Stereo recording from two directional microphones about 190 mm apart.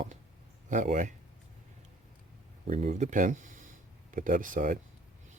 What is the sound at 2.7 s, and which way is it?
Speech, 35° right (ahead or behind).